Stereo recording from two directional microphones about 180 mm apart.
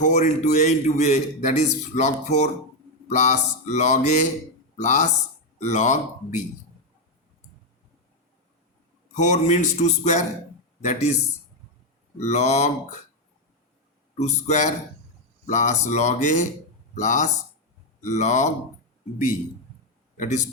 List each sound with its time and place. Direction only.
0.0 s a man's voice: 40° left (ahead or behind)
9.1 s a man's voice: 40° left (ahead or behind)
12.2 s a man's voice: 40° left (ahead or behind)
14.4 s a man's voice: 40° left (ahead or behind)
20.1 s a man's voice: 40° left (ahead or behind)